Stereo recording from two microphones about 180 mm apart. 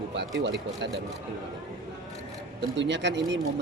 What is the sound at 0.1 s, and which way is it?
Speech, 70° right (ahead or behind).